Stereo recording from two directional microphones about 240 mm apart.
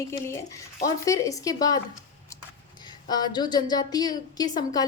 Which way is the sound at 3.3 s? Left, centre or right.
Centre.